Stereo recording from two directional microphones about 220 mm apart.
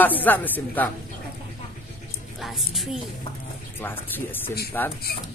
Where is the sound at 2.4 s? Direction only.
Centre (ahead or behind).